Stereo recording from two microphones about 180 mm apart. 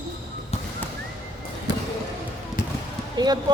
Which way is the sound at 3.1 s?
25° right (ahead or behind).